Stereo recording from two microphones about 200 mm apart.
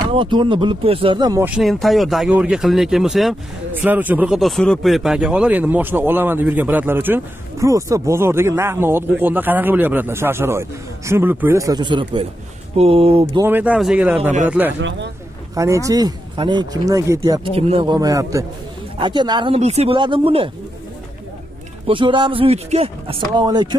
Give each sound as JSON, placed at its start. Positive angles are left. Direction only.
{"t": 0.1, "sound": "speech", "side_deg": -25}
{"t": 1.4, "sound": "speech", "side_deg": -5}
{"t": 13.4, "sound": "speech", "side_deg": -10}
{"t": 14.8, "sound": "speech", "side_deg": -65}
{"t": 15.5, "sound": "speech", "side_deg": -15}
{"t": 17.6, "sound": "speech", "side_deg": -30}
{"t": 19.5, "sound": "speech", "side_deg": -30}
{"t": 21.8, "sound": "speech", "side_deg": -25}